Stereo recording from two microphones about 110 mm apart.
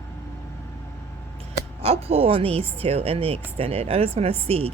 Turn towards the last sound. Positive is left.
turn(degrees=-65)  # may be behind; listen again after turning